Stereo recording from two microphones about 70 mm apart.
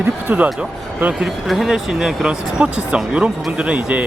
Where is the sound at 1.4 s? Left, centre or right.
Centre.